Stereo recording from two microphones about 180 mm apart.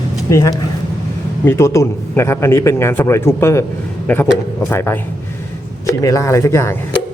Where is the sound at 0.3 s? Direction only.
15° left (ahead or behind).